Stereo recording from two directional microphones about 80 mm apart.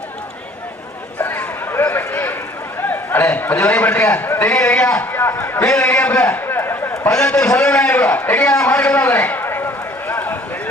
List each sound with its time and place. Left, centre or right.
1.2 s a sound: left
2.8 s a man's voice: left
5.3 s a man's voice: left
5.6 s a man's voice: centre
6.4 s a sound: left
7.1 s a man's voice: centre; by 10.1 s left